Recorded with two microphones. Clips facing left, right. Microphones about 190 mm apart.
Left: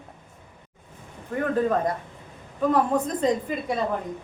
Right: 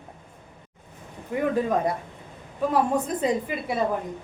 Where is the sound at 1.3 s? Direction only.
10° right (ahead or behind).